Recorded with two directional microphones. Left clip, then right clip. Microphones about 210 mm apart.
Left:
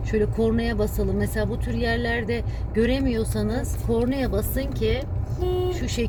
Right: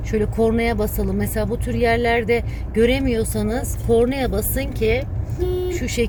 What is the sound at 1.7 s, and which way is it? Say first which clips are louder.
Speech: right 9 dB; 20° right (ahead or behind).